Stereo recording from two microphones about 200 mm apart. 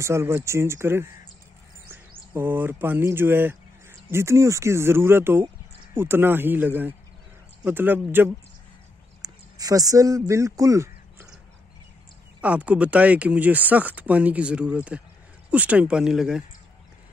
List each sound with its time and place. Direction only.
0.0 s speech: 15° right (ahead or behind)
12.4 s speech: 5° right (ahead or behind)